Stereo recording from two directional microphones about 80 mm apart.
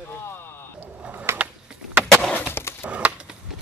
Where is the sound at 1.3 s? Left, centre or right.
Right.